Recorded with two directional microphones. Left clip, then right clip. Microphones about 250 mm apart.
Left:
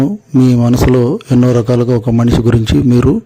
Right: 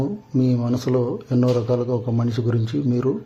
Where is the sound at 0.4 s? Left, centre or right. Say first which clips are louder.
Left 12 dB; left.